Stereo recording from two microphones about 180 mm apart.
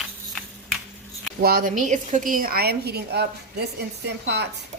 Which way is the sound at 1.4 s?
55° right (ahead or behind).